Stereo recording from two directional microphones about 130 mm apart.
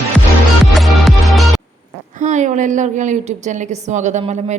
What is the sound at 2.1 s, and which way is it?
A woman's voice, 70° right (ahead or behind).